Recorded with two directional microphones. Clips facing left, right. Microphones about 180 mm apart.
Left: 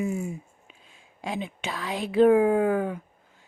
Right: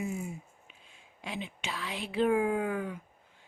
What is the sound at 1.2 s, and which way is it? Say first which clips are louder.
Speech: left 7 dB; 45° left (ahead or behind).